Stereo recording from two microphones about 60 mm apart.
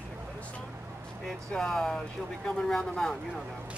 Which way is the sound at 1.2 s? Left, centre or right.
Centre.